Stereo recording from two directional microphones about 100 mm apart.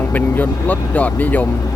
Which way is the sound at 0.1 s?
15° left (ahead or behind).